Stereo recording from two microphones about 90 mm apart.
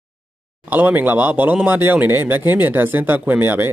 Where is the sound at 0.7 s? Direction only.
20° right (ahead or behind).